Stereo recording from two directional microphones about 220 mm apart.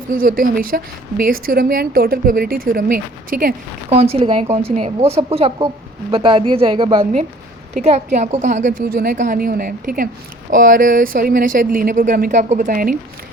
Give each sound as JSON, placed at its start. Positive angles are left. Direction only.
{"t": 0.1, "sound": "a woman's voice", "side_deg": -40}
{"t": 3.9, "sound": "a woman's voice", "side_deg": -25}